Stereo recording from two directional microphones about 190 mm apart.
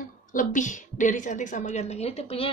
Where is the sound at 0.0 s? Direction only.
45° left (ahead or behind).